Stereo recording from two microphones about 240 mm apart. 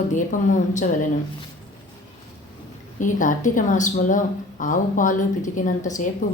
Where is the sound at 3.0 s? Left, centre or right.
Left.